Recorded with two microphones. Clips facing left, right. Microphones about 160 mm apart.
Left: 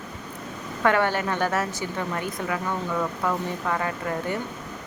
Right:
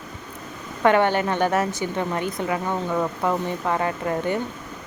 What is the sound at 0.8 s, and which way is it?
Speech, 20° right (ahead or behind).